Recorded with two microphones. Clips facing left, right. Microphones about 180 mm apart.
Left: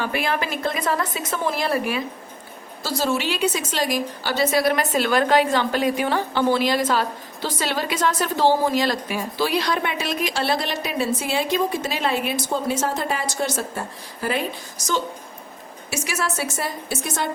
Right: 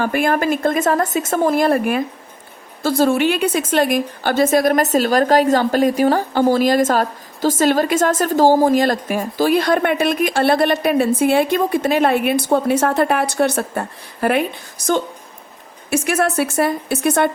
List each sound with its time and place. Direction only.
0.0 s a woman's voice: 50° right (ahead or behind)